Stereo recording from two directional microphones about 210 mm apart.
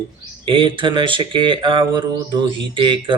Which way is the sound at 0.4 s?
25° right (ahead or behind).